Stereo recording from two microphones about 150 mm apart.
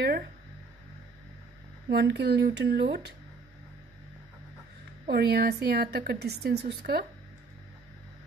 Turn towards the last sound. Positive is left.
turn(degrees=-90)